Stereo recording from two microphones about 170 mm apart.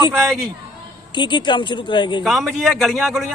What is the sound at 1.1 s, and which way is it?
Speech, 25° left (ahead or behind).